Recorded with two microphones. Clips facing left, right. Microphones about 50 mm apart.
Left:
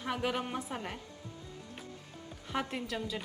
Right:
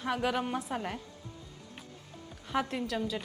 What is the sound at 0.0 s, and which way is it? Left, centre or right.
Speech, centre.